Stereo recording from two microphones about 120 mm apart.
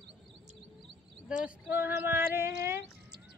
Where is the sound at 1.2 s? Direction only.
10° right (ahead or behind).